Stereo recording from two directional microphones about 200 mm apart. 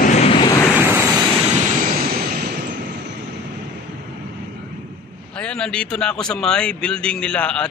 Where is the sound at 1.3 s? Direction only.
40° right (ahead or behind).